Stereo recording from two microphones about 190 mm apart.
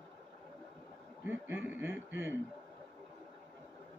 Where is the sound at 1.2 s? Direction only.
10° right (ahead or behind).